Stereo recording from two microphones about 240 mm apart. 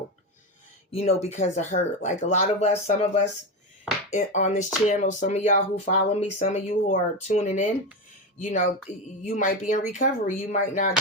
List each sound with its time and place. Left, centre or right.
0.9 s speech: left